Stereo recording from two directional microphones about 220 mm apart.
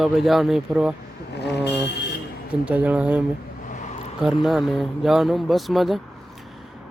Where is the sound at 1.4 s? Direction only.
50° left (ahead or behind).